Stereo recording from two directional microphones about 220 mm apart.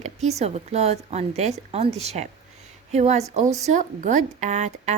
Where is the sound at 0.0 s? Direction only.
30° right (ahead or behind).